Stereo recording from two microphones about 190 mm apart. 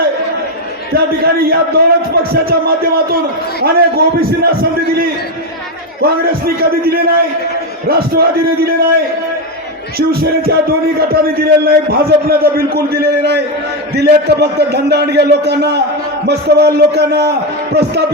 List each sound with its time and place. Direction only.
0.9 s a man's voice: 55° right (ahead or behind)
6.0 s a man's voice: 55° right (ahead or behind)
10.1 s speech: 55° right (ahead or behind)